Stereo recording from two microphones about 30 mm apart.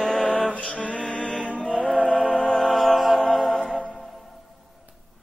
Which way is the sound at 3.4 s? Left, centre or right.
Centre.